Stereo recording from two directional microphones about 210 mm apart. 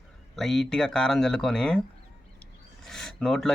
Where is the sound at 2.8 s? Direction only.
Centre (ahead or behind).